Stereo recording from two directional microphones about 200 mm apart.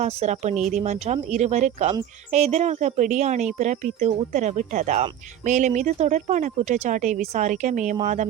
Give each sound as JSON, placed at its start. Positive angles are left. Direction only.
{"t": 0.0, "sound": "speech", "side_deg": -35}